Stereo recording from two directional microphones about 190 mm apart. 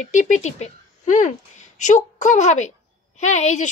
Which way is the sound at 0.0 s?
40° left (ahead or behind).